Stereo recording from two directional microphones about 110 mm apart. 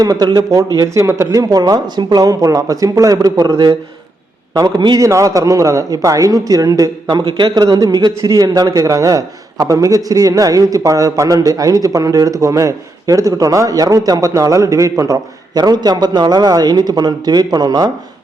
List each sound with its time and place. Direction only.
0.0 s speech: 35° right (ahead or behind)
4.8 s speech: 40° right (ahead or behind)
5.0 s speech: 30° right (ahead or behind)